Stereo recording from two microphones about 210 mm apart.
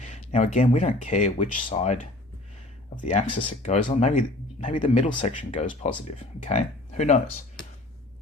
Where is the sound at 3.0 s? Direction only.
30° left (ahead or behind).